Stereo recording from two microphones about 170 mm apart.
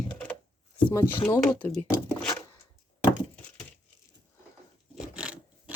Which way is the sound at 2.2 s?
5° left (ahead or behind).